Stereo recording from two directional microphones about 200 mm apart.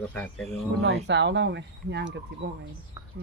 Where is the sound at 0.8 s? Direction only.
60° right (ahead or behind).